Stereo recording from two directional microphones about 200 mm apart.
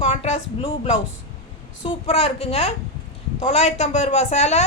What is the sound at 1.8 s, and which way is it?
Speech, 30° left (ahead or behind).